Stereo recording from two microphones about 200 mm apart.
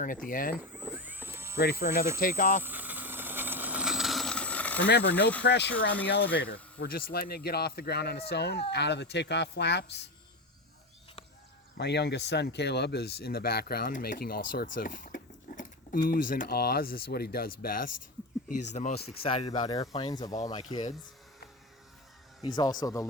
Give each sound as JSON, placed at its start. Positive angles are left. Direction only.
{"t": 0.0, "sound": "speech", "side_deg": 45}
{"t": 0.9, "sound": "a sound", "side_deg": -10}
{"t": 1.5, "sound": "speech", "side_deg": 50}
{"t": 2.6, "sound": "vehicle", "side_deg": -10}
{"t": 4.9, "sound": "speech", "side_deg": 60}
{"t": 11.8, "sound": "speech", "side_deg": 60}
{"t": 19.2, "sound": "speech", "side_deg": 30}
{"t": 22.4, "sound": "speech", "side_deg": 20}